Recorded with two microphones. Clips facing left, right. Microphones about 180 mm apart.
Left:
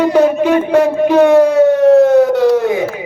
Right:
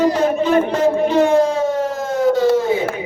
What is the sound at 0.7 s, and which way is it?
Siren, 70° left (ahead or behind).